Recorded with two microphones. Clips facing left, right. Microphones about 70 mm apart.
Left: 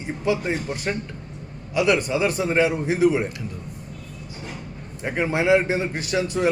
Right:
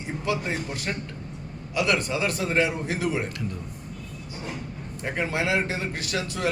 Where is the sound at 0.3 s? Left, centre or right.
Left.